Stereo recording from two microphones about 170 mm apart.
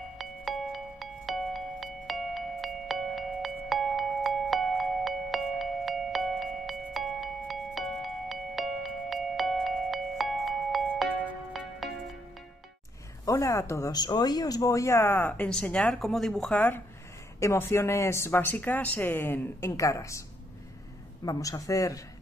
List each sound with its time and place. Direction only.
0.2 s music: centre (ahead or behind)
13.2 s speech: 20° left (ahead or behind)
21.3 s speech: 20° left (ahead or behind)